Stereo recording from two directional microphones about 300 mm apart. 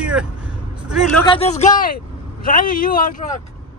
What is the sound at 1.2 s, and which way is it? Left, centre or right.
Speech, centre.